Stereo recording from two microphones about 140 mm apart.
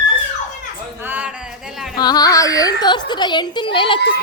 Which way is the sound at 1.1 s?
10° right (ahead or behind).